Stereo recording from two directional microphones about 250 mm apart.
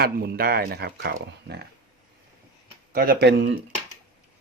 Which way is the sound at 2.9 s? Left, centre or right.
Right.